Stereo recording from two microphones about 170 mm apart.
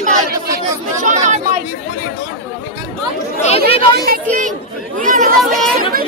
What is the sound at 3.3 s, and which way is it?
Speech, 40° left (ahead or behind).